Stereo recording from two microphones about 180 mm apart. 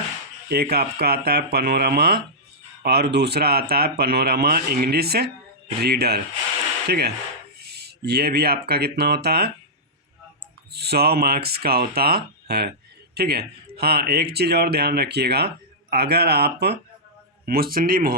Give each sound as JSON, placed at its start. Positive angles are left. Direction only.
{"t": 0.4, "sound": "speech", "side_deg": -60}
{"t": 10.7, "sound": "speech", "side_deg": -65}